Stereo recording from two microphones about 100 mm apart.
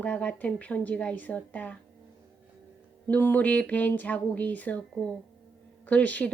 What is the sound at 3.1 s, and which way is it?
Speech, 20° left (ahead or behind).